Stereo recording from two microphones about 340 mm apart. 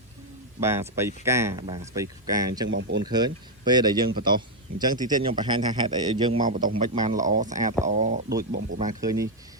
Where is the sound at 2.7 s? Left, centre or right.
Right.